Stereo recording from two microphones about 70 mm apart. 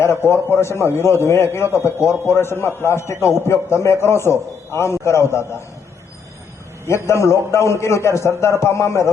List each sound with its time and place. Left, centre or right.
0.0 s a man's voice: left
6.8 s a man's voice: left